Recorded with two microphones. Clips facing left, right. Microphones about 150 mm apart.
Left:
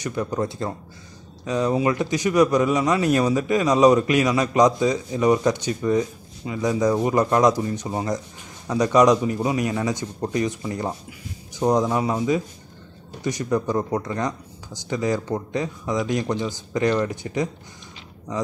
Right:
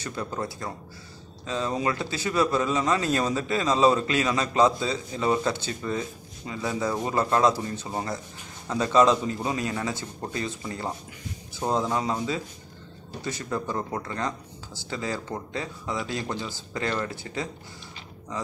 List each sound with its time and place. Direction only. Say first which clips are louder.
0.0 s a man's voice: left 6 dB; 15° left (ahead or behind)
11.6 s a man's voice: left 6 dB; 15° left (ahead or behind)